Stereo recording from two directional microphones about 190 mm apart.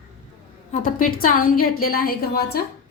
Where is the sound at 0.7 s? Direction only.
45° left (ahead or behind).